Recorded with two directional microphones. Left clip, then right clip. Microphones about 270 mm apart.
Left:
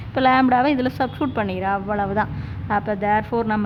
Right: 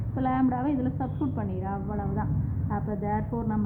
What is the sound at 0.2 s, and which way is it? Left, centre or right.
A woman's voice, left.